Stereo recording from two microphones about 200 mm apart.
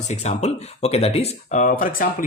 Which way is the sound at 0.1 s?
35° left (ahead or behind).